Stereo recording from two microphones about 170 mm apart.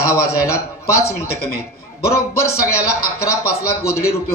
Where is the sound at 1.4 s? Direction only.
65° left (ahead or behind).